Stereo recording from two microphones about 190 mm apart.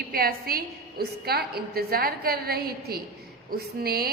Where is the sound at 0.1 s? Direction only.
50° right (ahead or behind).